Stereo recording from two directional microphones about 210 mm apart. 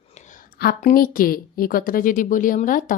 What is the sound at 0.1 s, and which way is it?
A woman's voice, 35° left (ahead or behind).